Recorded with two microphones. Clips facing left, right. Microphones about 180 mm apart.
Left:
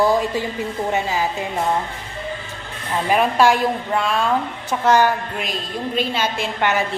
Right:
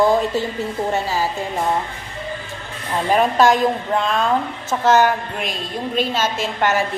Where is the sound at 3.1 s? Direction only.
10° left (ahead or behind).